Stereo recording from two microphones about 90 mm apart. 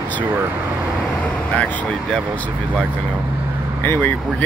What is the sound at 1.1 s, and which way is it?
Speech, 10° left (ahead or behind).